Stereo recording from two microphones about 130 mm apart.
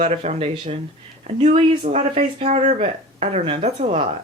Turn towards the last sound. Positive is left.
turn(degrees=-50)  # may be behind; listen again after turning